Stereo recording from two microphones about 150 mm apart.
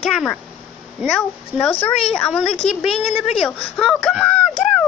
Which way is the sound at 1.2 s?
10° left (ahead or behind).